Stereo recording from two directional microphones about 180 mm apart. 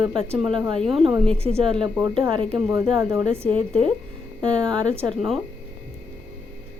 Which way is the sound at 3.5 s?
30° right (ahead or behind).